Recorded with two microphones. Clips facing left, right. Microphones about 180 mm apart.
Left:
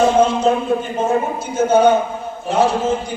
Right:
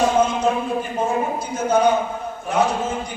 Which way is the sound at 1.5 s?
25° left (ahead or behind).